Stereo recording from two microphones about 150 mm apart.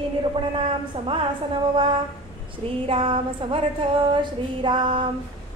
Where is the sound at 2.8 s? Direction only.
35° right (ahead or behind).